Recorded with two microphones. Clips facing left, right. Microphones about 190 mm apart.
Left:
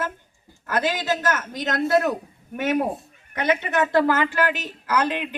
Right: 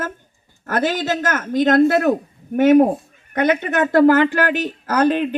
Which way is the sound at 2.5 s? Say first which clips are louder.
Right 11 dB; 45° right (ahead or behind).